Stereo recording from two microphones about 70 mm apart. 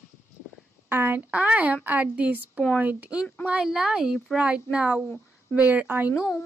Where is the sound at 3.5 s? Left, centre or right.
Centre; by 6.1 s right.